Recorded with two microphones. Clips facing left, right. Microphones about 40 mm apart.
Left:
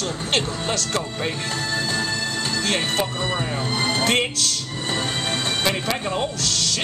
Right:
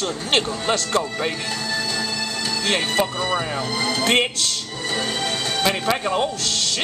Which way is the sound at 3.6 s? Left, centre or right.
Left.